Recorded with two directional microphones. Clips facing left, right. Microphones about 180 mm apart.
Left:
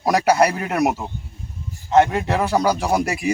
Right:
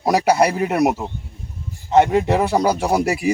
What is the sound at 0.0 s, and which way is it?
Speech, 5° right (ahead or behind).